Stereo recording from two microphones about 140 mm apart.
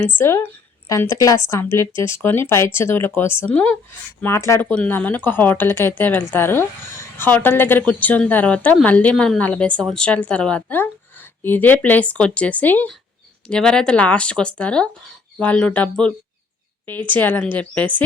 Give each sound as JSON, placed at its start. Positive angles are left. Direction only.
{"t": 0.2, "sound": "a woman's voice", "side_deg": 15}